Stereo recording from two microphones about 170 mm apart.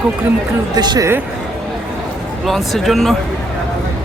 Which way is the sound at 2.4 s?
Centre (ahead or behind).